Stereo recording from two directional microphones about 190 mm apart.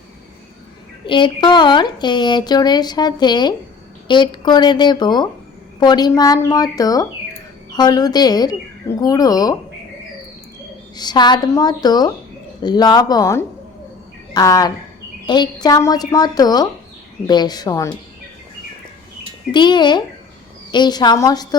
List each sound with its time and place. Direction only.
1.0 s speech: 25° left (ahead or behind)
10.9 s speech: 20° left (ahead or behind)
19.5 s speech: 25° left (ahead or behind)